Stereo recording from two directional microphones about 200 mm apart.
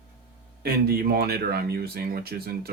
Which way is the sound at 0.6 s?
50° right (ahead or behind).